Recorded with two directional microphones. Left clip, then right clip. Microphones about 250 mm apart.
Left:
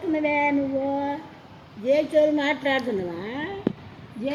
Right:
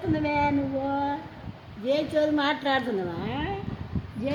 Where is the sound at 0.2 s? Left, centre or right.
Centre.